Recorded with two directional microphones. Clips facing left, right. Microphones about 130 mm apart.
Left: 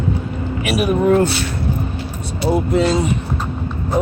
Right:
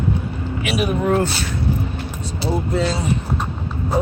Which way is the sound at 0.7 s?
60° left (ahead or behind).